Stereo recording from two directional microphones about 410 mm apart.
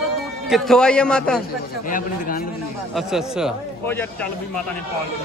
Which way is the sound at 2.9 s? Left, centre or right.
Centre.